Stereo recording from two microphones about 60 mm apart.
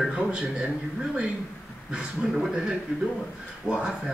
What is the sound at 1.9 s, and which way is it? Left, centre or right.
A man's voice, centre.